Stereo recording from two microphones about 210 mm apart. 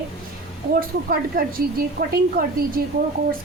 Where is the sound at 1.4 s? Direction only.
45° right (ahead or behind).